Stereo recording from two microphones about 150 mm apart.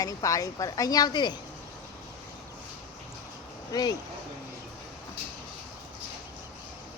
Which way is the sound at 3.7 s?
25° left (ahead or behind).